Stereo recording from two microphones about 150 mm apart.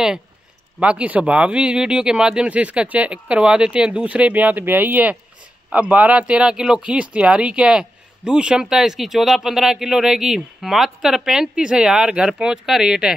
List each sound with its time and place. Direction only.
0.7 s speech: 10° right (ahead or behind)